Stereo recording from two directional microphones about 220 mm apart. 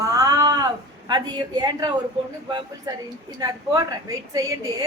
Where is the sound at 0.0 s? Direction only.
15° right (ahead or behind).